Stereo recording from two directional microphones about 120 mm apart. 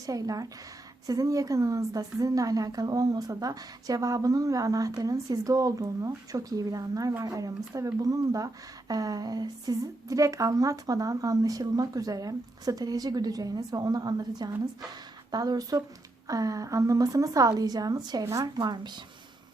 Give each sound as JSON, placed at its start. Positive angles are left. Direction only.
{"t": 0.0, "sound": "a woman's voice", "side_deg": -30}